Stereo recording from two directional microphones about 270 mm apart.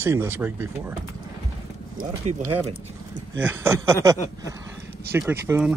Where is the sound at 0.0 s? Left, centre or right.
Centre.